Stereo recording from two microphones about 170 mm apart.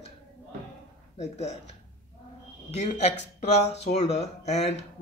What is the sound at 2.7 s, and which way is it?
Speech, 40° left (ahead or behind).